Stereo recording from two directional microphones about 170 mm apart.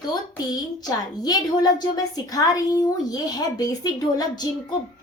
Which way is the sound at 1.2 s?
25° left (ahead or behind).